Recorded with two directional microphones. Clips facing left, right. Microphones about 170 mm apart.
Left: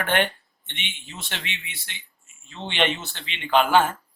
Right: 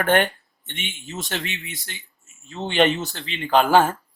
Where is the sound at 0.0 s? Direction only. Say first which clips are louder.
Right 4 dB; 45° right (ahead or behind).